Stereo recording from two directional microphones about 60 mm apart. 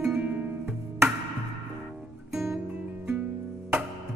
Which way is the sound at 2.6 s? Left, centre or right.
Right.